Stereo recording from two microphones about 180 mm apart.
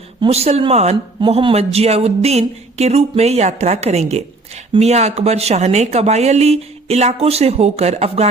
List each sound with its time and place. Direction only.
0.2 s speech: 35° right (ahead or behind)